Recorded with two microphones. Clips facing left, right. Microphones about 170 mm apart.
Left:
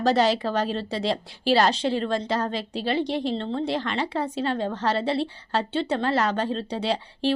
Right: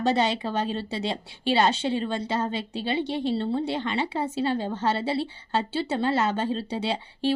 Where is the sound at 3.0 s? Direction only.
5° right (ahead or behind).